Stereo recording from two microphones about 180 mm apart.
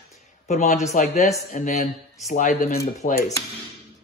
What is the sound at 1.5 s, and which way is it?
Dishes, 45° left (ahead or behind).